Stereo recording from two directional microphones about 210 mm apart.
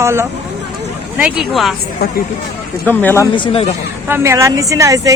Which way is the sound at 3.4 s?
25° left (ahead or behind).